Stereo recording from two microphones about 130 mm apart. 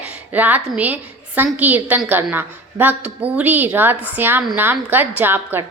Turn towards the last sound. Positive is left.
turn(degrees=-15)  # may be behind; listen again after turning